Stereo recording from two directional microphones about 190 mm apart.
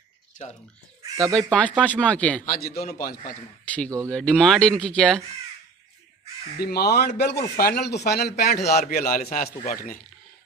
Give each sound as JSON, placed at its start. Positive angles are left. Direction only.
{"t": 1.0, "sound": "chicken", "side_deg": -20}
{"t": 1.5, "sound": "speech", "side_deg": 5}
{"t": 3.0, "sound": "a man's voice", "side_deg": 50}
{"t": 3.6, "sound": "speech", "side_deg": 5}
{"t": 6.6, "sound": "a man's voice", "side_deg": 55}
{"t": 9.6, "sound": "speech", "side_deg": 40}